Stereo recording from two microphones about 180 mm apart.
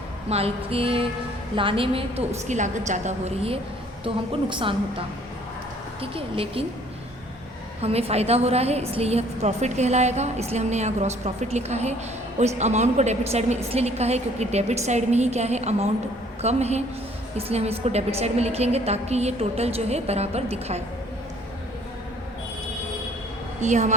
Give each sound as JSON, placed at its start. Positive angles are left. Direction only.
{"t": 0.3, "sound": "a woman's voice", "side_deg": -35}
{"t": 7.8, "sound": "a woman's voice", "side_deg": -35}
{"t": 23.6, "sound": "a woman's voice", "side_deg": -40}